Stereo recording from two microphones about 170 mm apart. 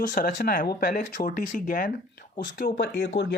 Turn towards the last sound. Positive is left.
turn(degrees=80)